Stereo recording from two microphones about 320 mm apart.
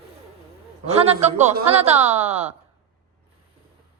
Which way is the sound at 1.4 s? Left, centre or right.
Right.